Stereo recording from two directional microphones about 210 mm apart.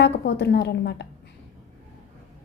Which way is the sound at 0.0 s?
55° left (ahead or behind).